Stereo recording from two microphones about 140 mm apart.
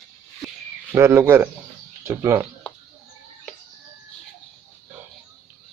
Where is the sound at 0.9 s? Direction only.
20° right (ahead or behind).